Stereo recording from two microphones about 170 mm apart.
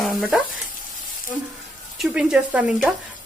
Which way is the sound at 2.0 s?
5° right (ahead or behind).